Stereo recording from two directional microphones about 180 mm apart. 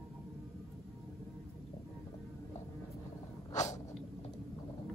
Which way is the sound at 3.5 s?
40° left (ahead or behind).